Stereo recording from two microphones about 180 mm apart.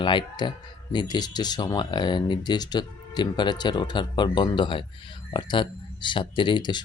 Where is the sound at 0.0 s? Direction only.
25° left (ahead or behind).